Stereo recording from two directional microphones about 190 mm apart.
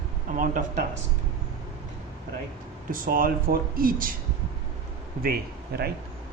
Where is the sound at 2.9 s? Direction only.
50° right (ahead or behind).